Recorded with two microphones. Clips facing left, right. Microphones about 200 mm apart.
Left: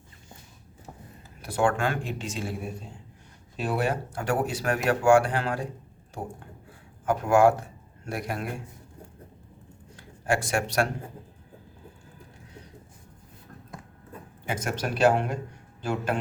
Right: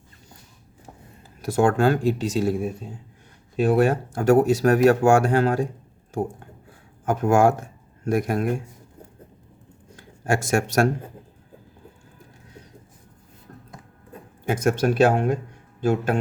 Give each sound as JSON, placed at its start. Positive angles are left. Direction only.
{"t": 1.4, "sound": "speech", "side_deg": -40}
{"t": 3.6, "sound": "speech", "side_deg": -50}
{"t": 7.0, "sound": "speech", "side_deg": -45}
{"t": 9.9, "sound": "a sound", "side_deg": -45}
{"t": 14.1, "sound": "speech", "side_deg": -45}